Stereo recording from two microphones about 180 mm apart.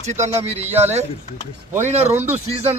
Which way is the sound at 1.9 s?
35° right (ahead or behind).